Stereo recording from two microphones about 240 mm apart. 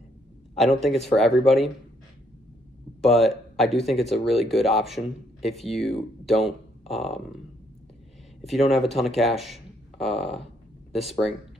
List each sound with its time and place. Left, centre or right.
0.6 s speech: centre
3.0 s speech: centre
8.5 s speech: centre
10.4 s a sound: centre